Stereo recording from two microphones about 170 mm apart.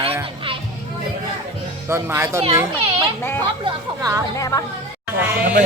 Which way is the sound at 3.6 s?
20° right (ahead or behind).